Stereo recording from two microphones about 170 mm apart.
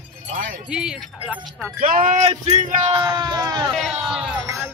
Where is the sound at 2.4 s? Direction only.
40° right (ahead or behind).